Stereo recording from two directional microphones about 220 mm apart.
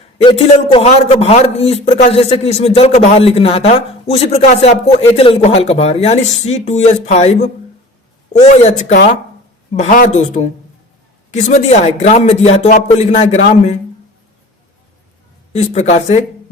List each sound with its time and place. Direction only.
0.2 s a man's voice: 25° left (ahead or behind)
15.5 s speech: 30° left (ahead or behind)